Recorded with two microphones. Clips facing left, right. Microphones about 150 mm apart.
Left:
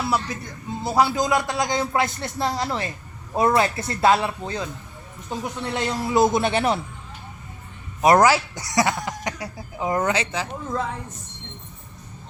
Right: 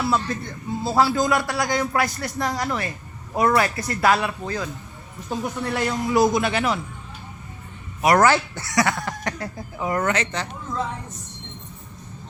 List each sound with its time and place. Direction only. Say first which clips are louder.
0.3 s a man's voice: right 3 dB; 10° left (ahead or behind); by 6.7 s 30° left (ahead or behind)
8.0 s a man's voice: left 1 dB; 25° left (ahead or behind)
10.1 s speech: even; 10° left (ahead or behind)